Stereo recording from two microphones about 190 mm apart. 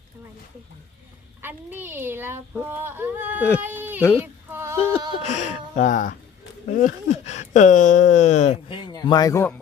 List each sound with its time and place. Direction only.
1.4 s speech: 10° right (ahead or behind)
3.6 s sheep: 10° right (ahead or behind)
4.2 s female singing: 15° right (ahead or behind)
5.2 s speech: 35° left (ahead or behind)
8.9 s speech: 20° left (ahead or behind)